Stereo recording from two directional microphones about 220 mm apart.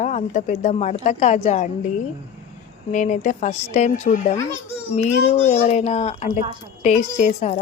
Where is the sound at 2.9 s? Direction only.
35° left (ahead or behind).